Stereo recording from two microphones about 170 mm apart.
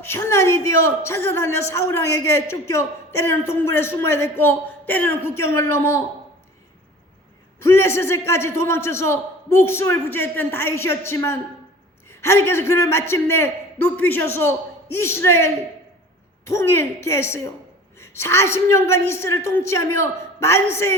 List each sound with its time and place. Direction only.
0.0 s a man's voice: 15° left (ahead or behind)
7.6 s a man's voice: 15° left (ahead or behind)